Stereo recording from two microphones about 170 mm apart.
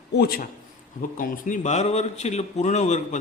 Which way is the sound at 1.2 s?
45° left (ahead or behind).